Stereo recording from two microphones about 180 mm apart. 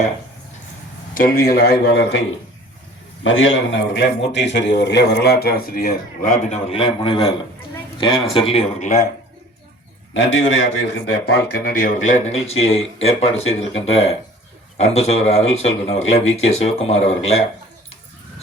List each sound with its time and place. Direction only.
1.1 s a man's voice: 55° left (ahead or behind); by 2.2 s 70° left (ahead or behind)
3.2 s a man's voice: 90° left; by 9.0 s 40° left (ahead or behind)
10.2 s a man's voice: 90° left
11.1 s speech: 60° left (ahead or behind); by 17.2 s 35° left (ahead or behind)